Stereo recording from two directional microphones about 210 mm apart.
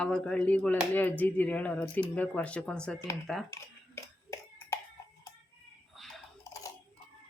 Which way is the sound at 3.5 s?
15° left (ahead or behind).